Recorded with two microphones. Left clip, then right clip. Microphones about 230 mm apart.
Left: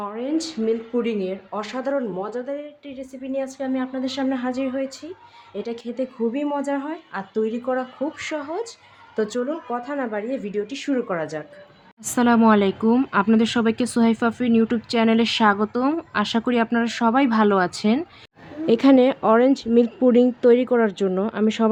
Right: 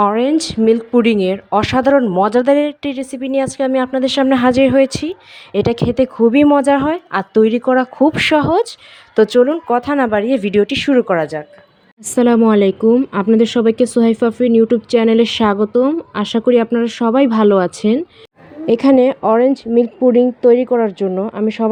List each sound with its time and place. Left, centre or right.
0.0 s speech: right
12.0 s speech: centre